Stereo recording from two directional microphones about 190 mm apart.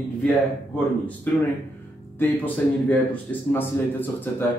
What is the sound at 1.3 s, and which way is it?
A man's voice, 10° left (ahead or behind).